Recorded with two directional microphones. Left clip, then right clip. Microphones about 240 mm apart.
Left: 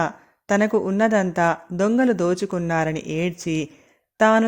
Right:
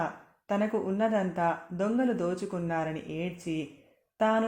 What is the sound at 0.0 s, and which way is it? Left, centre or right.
Speech, left.